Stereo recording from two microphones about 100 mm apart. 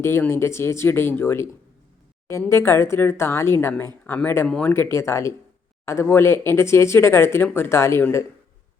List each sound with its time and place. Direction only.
0.0 s speech: 25° left (ahead or behind)
2.5 s speech: 25° left (ahead or behind)
4.4 s speech: 10° left (ahead or behind)
4.7 s speech: 25° left (ahead or behind)